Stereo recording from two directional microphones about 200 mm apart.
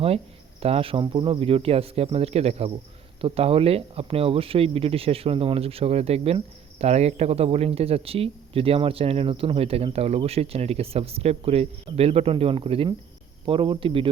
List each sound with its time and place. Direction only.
0.6 s speech: 30° right (ahead or behind)